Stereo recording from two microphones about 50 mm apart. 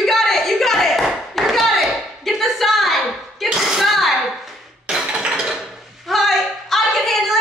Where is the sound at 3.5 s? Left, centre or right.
Centre.